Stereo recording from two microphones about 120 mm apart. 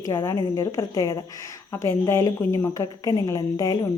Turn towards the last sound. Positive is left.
turn(degrees=25)  # may be behind; listen again after turning